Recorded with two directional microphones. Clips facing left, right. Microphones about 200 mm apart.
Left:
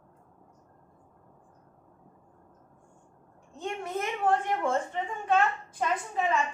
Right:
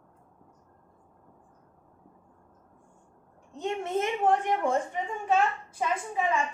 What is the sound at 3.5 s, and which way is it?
A woman's voice, 20° right (ahead or behind).